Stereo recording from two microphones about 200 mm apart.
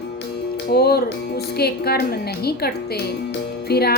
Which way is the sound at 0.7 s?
50° left (ahead or behind).